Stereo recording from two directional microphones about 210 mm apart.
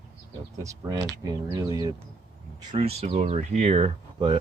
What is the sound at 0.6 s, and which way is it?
Speech, 15° right (ahead or behind).